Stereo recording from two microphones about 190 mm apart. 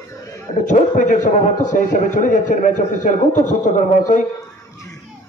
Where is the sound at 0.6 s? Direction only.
40° left (ahead or behind).